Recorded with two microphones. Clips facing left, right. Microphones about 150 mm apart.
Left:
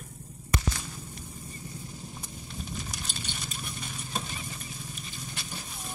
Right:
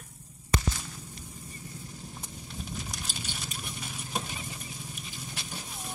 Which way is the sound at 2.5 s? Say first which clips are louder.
Even; centre (ahead or behind).